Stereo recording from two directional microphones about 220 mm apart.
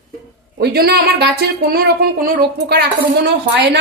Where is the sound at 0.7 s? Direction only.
45° right (ahead or behind).